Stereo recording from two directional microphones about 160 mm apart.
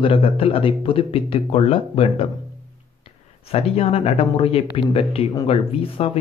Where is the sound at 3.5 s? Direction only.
40° left (ahead or behind).